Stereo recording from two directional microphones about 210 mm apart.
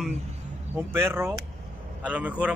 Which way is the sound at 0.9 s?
10° right (ahead or behind).